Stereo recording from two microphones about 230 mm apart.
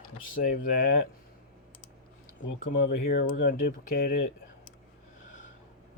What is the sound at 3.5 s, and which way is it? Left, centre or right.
Speech, left.